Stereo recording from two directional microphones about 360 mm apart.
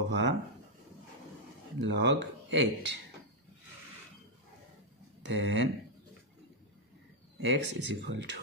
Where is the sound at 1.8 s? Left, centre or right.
Right.